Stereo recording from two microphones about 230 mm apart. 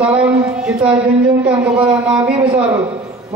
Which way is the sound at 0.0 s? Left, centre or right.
Centre.